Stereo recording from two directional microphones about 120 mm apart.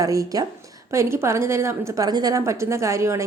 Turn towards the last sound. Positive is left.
turn(degrees=-25)  # may be behind; listen again after turning